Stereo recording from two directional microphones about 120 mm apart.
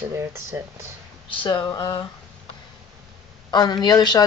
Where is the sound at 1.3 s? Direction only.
45° left (ahead or behind).